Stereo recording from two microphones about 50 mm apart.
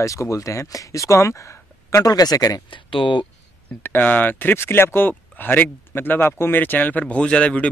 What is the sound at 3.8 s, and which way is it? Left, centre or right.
Speech, left.